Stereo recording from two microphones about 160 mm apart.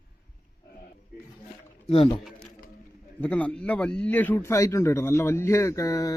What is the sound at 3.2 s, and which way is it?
A man's voice, 10° left (ahead or behind).